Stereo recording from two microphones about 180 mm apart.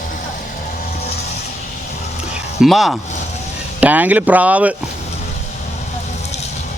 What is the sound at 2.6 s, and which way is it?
Speech, centre (ahead or behind).